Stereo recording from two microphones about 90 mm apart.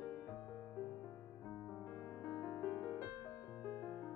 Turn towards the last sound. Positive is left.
turn(degrees=40)  # may be behind; listen again after turning